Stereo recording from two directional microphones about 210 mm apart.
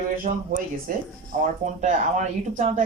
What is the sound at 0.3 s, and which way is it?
Speech, 40° right (ahead or behind).